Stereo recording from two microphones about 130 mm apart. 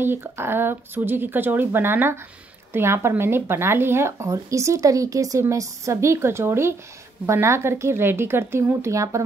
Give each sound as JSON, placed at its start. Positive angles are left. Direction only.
{"t": 0.0, "sound": "speech", "side_deg": -20}